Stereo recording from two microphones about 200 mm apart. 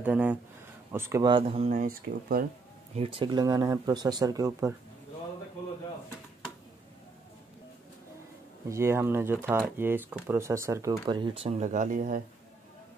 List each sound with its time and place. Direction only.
0.0 s speech: 5° right (ahead or behind)
1.3 s speech: 25° right (ahead or behind)
1.7 s speech: 45° right (ahead or behind)
3.0 s speech: 25° right (ahead or behind)
8.6 s speech: 15° right (ahead or behind); by 12.2 s 40° right (ahead or behind)